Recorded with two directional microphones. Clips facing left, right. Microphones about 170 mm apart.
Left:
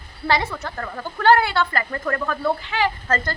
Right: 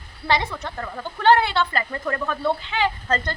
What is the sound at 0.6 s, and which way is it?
A woman's voice, 15° right (ahead or behind).